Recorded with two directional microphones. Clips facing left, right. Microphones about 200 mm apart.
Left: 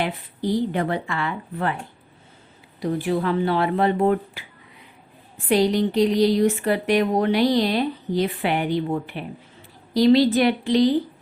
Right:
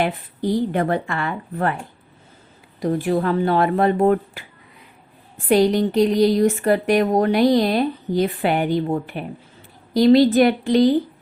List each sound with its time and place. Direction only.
0.7 s speech: 50° right (ahead or behind)
2.8 s speech: 45° right (ahead or behind)
5.5 s speech: 50° right (ahead or behind)